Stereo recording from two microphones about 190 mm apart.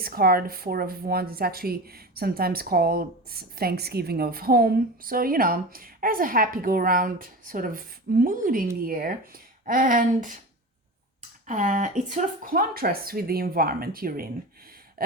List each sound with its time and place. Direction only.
0.0 s speech: 50° right (ahead or behind)
11.4 s speech: 40° right (ahead or behind)
15.0 s a sound: 50° right (ahead or behind)